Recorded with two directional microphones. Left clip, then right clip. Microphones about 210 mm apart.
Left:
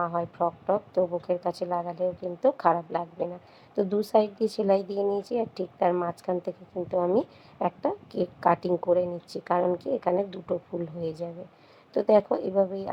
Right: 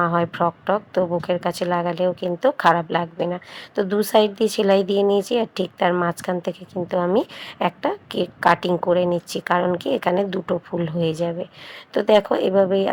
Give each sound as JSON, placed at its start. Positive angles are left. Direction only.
{"t": 0.0, "sound": "speech", "side_deg": -15}
{"t": 10.5, "sound": "speech", "side_deg": -25}
{"t": 10.8, "sound": "speech", "side_deg": -10}